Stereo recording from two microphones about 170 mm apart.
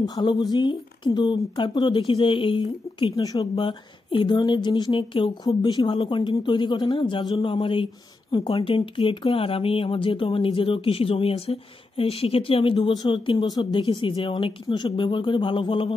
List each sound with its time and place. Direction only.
0.0 s speech: 25° left (ahead or behind)